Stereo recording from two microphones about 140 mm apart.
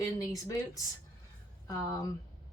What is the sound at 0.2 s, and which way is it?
Speech, 25° left (ahead or behind).